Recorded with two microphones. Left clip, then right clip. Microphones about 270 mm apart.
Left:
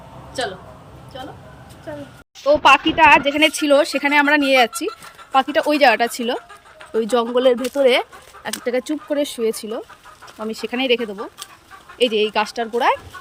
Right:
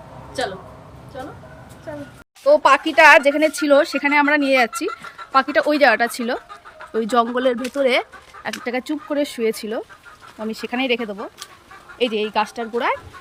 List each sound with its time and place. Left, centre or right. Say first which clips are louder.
2.5 s a woman's voice: left 1 dB; centre